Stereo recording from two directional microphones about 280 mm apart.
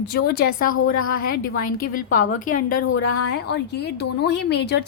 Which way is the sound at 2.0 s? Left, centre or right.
Left.